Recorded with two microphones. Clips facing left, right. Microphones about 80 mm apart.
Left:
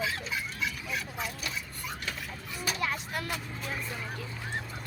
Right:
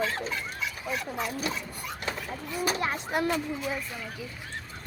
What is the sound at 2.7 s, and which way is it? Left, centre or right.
Speech, right.